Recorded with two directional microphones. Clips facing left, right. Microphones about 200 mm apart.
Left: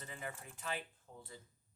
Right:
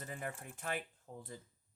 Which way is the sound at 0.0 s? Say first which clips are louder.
Right 3 dB; 50° right (ahead or behind).